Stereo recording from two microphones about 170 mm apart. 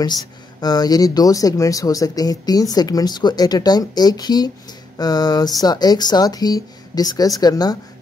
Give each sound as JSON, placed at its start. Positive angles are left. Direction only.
{"t": 0.0, "sound": "speech", "side_deg": 25}